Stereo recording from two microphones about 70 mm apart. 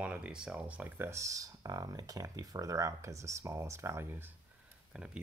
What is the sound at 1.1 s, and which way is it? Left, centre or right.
Speech, right.